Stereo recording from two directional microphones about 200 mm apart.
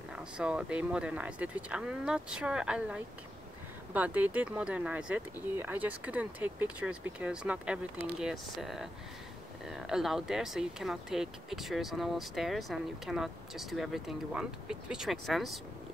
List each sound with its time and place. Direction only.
0.1 s speech: 5° right (ahead or behind)